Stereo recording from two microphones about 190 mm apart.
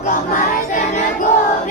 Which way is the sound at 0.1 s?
45° left (ahead or behind).